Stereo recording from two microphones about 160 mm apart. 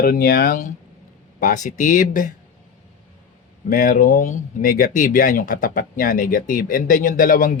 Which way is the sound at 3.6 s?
55° left (ahead or behind).